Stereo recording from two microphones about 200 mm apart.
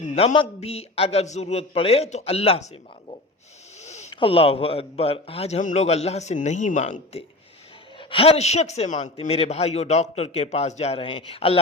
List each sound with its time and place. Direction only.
0.0 s a man's voice: 35° left (ahead or behind)
3.8 s a man's voice: 35° left (ahead or behind)